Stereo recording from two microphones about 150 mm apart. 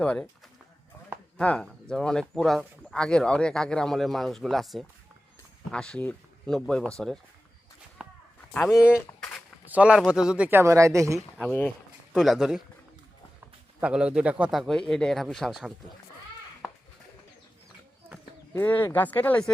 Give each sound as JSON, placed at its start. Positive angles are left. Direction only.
{"t": 0.0, "sound": "speech", "side_deg": 10}
{"t": 1.4, "sound": "speech", "side_deg": 5}
{"t": 8.0, "sound": "a sound", "side_deg": -5}
{"t": 8.7, "sound": "speech", "side_deg": -5}
{"t": 12.1, "sound": "speech", "side_deg": 0}
{"t": 13.8, "sound": "speech", "side_deg": -5}
{"t": 18.5, "sound": "speech", "side_deg": 15}